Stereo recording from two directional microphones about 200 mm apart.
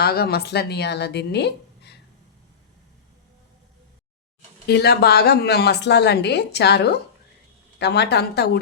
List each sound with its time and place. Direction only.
0.0 s a woman's voice: 50° left (ahead or behind)
4.6 s a woman's voice: 55° left (ahead or behind)